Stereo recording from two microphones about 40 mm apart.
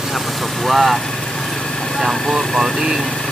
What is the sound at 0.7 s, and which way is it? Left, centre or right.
Speech, centre.